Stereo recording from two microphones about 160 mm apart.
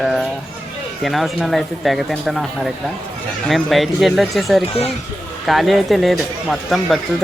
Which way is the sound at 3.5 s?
Centre (ahead or behind).